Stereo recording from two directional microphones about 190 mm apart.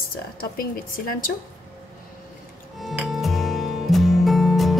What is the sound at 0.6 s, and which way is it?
Speech, 50° left (ahead or behind).